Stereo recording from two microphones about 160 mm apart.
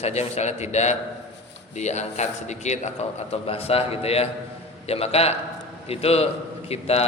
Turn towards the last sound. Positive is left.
turn(degrees=40)  # may be behind; listen again after turning